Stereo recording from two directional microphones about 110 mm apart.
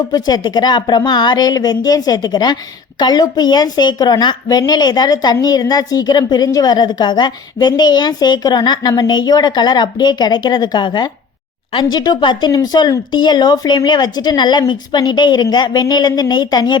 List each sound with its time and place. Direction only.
0.1 s speech: 35° left (ahead or behind)